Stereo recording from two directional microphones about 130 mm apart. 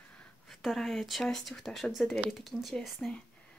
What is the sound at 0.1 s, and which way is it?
Speech, 5° left (ahead or behind).